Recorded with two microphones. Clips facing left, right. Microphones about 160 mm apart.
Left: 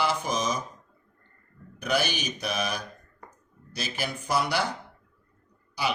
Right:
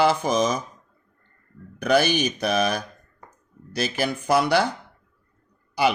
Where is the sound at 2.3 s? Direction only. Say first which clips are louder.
Right 8 dB; 60° right (ahead or behind); by 4.6 s 80° right.